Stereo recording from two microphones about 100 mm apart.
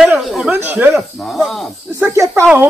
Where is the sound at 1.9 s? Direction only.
30° right (ahead or behind).